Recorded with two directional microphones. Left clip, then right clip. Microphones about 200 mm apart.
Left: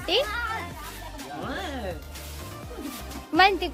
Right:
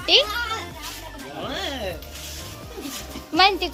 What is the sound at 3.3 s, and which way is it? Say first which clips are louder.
Speech: right 2 dB; 20° left (ahead or behind).